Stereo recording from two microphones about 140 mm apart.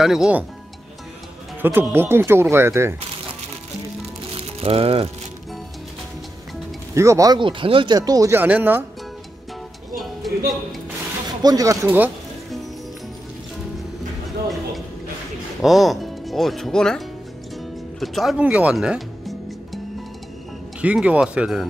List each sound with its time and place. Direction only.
0.0 s speech: 5° right (ahead or behind)
1.6 s speech: 15° right (ahead or behind)
4.3 s music: 45° right (ahead or behind)
6.9 s speech: 20° right (ahead or behind)
7.3 s speech: 40° right (ahead or behind); by 8.8 s 10° right (ahead or behind)
9.9 s a sound: centre (ahead or behind)
11.4 s speech: 25° right (ahead or behind)
15.6 s speech: centre (ahead or behind)
18.0 s music: centre (ahead or behind)
20.8 s speech: 10° right (ahead or behind)